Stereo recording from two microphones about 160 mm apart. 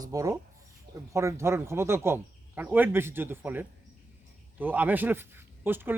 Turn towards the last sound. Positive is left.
turn(degrees=-15)  # may be behind; listen again after turning